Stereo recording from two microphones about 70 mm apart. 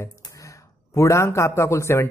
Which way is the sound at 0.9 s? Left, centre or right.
Left.